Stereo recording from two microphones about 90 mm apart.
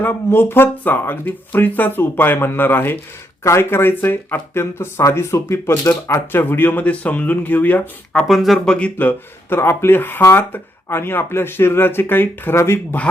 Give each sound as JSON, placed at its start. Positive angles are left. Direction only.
{"t": 0.0, "sound": "speech", "side_deg": 25}
{"t": 8.3, "sound": "speech", "side_deg": 0}